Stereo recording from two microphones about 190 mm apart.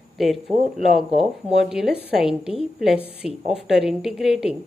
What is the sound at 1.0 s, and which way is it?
Speech, 30° right (ahead or behind).